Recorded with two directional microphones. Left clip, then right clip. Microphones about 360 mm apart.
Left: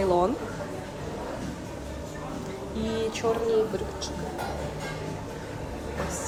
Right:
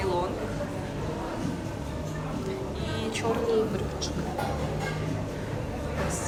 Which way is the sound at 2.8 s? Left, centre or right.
Centre.